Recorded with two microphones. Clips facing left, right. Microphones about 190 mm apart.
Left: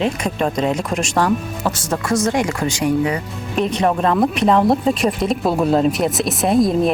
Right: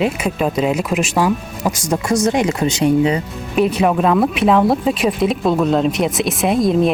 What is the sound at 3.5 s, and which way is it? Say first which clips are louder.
Speech: right 3 dB; 5° right (ahead or behind).